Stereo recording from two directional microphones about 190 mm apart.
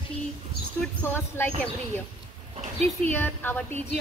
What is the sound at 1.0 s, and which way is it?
Speech, 10° left (ahead or behind).